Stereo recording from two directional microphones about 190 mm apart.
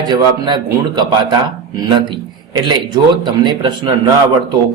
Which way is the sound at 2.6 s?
25° right (ahead or behind).